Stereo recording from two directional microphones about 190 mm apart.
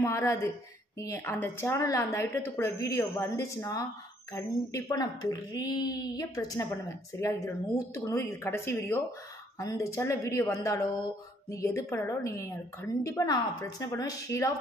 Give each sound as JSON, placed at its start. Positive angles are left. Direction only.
{"t": 0.0, "sound": "a woman's voice", "side_deg": 15}